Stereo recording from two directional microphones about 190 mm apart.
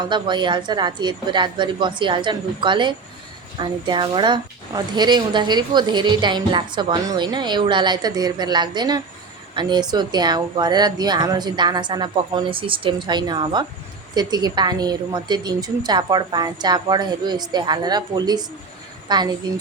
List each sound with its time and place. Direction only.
0.0 s a woman's voice: 25° right (ahead or behind)